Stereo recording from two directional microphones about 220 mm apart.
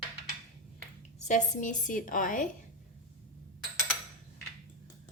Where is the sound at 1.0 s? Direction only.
35° left (ahead or behind).